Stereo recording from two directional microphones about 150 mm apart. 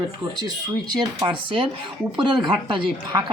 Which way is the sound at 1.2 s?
35° right (ahead or behind).